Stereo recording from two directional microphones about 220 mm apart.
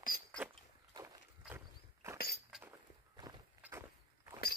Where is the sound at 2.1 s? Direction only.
45° left (ahead or behind).